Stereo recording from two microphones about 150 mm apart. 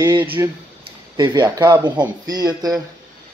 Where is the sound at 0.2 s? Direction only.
15° right (ahead or behind).